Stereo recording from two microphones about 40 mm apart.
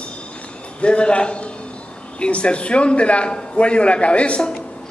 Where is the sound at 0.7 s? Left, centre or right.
Left.